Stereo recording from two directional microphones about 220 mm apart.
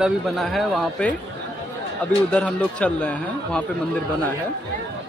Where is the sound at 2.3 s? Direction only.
5° left (ahead or behind).